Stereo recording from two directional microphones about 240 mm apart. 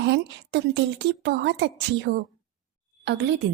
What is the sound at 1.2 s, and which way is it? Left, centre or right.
Speech, right.